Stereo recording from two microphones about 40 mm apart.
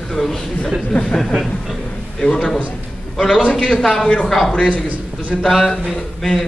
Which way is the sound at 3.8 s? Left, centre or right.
Centre.